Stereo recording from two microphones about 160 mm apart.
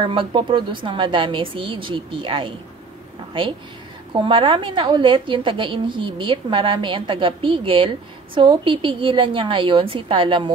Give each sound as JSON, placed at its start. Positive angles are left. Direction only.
{"t": 0.0, "sound": "a woman's voice", "side_deg": -30}
{"t": 4.2, "sound": "a woman's voice", "side_deg": -30}